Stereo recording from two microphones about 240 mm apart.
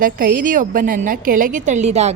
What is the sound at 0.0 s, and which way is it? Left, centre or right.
A woman's voice, right.